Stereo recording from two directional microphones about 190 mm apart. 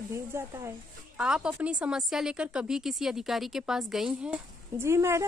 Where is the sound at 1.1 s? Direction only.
5° right (ahead or behind).